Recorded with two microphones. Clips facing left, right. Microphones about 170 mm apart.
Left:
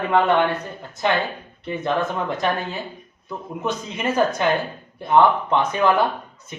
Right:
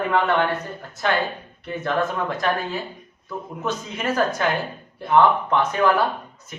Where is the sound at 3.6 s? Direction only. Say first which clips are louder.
Left 1 dB; 20° left (ahead or behind).